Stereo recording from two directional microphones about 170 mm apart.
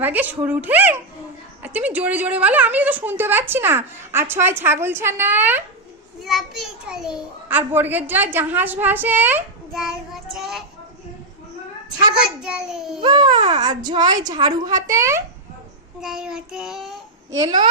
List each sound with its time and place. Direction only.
0.0 s a woman's voice: 10° right (ahead or behind)
9.7 s child singing: centre (ahead or behind)
12.4 s child singing: 5° right (ahead or behind)
13.0 s a woman's voice: 25° right (ahead or behind)
16.0 s child singing: 5° right (ahead or behind)
17.3 s speech: 25° right (ahead or behind)